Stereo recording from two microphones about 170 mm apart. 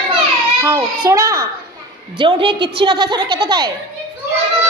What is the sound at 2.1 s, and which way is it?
A child's voice, 30° right (ahead or behind).